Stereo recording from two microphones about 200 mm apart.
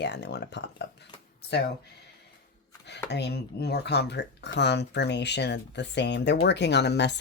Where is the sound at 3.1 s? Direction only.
55° left (ahead or behind).